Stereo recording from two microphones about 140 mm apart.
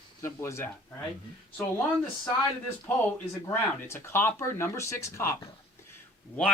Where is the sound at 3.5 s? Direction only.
20° left (ahead or behind).